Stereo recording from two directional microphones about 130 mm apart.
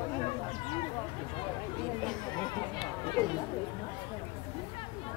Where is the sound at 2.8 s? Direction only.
40° left (ahead or behind).